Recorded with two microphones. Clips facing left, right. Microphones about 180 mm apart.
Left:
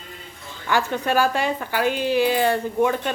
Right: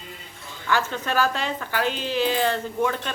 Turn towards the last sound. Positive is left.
turn(degrees=15)  # may be behind; listen again after turning